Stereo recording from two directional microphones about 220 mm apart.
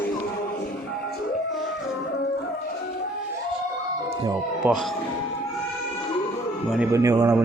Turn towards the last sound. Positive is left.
turn(degrees=-15)  # may be behind; listen again after turning